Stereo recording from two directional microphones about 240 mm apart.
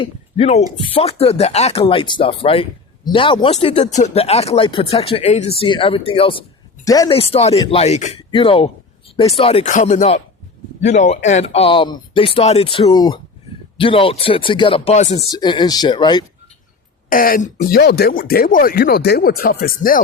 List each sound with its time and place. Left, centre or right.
0.0 s speech: left
15.3 s speech: centre
17.1 s speech: left